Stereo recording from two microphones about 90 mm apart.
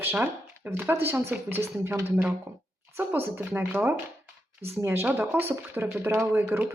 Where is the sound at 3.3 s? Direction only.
25° right (ahead or behind).